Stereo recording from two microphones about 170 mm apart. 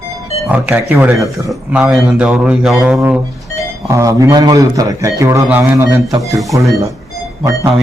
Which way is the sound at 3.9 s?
20° right (ahead or behind).